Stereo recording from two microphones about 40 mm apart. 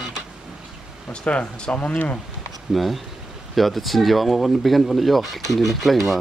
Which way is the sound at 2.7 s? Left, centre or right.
Centre.